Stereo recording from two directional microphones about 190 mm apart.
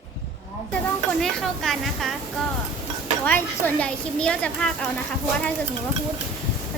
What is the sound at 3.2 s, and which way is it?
A woman's voice, 10° left (ahead or behind).